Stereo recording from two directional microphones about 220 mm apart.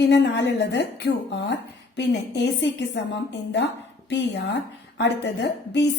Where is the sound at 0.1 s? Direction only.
50° left (ahead or behind).